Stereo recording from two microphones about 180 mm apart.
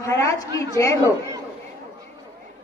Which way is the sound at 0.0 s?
15° left (ahead or behind).